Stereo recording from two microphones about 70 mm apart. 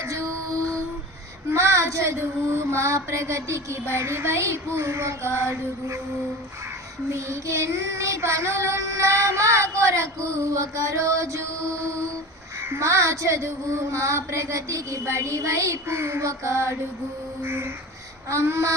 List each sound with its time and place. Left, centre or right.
0.0 s music: right
1.5 s female singing: right
7.1 s child singing: right
17.4 s female singing: right